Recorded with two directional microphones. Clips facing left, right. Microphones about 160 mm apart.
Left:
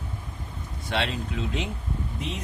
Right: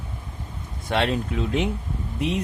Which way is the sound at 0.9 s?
50° right (ahead or behind).